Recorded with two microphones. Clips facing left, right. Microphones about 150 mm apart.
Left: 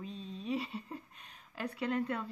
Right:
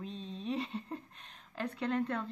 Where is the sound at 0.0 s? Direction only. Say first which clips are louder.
Right 1 dB; 5° left (ahead or behind).